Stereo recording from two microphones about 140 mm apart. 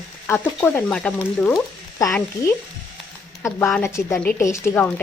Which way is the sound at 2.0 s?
20° left (ahead or behind).